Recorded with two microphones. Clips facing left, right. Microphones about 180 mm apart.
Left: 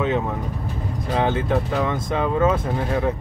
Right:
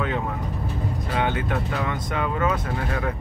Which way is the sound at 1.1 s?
30° left (ahead or behind).